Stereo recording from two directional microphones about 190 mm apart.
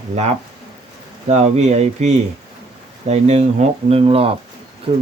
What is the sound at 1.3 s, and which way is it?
Speech, 35° right (ahead or behind).